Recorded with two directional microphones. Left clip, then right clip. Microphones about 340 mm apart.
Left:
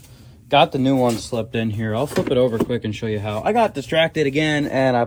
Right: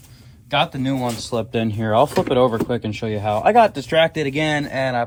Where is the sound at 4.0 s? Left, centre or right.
Centre.